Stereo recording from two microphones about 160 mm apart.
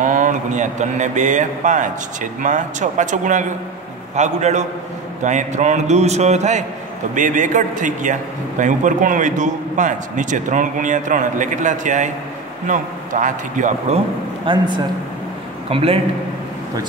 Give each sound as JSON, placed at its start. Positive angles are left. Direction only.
{"t": 0.0, "sound": "a man's voice", "side_deg": -55}